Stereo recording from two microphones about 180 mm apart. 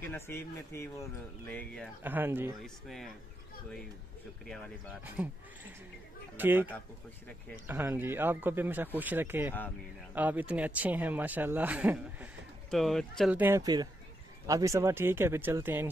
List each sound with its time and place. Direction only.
0.1 s speech: 15° left (ahead or behind)
2.0 s speech: 10° right (ahead or behind)
2.6 s speech: centre (ahead or behind)
5.0 s speech: 10° right (ahead or behind)
6.3 s speech: 10° right (ahead or behind)
13.4 s speech: 15° right (ahead or behind)